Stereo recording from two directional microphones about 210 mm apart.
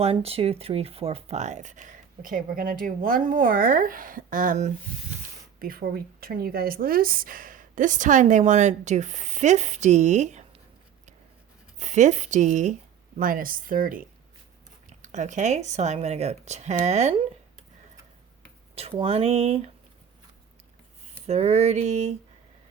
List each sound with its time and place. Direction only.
0.0 s a woman's voice: 30° right (ahead or behind)
11.8 s a woman's voice: 35° right (ahead or behind)
18.7 s speech: 30° right (ahead or behind)
21.2 s a woman's voice: 30° right (ahead or behind)